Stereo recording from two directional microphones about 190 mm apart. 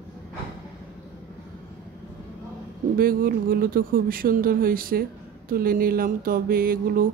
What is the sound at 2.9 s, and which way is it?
Speech, 50° right (ahead or behind).